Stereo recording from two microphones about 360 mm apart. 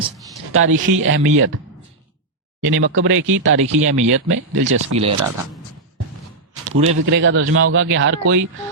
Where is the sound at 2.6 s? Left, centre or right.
Right.